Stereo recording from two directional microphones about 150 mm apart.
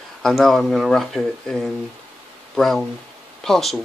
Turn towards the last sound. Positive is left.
turn(degrees=0)  # may be behind; listen again after turning